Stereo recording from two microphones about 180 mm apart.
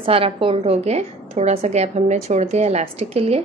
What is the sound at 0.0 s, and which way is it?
A woman's voice, 30° right (ahead or behind).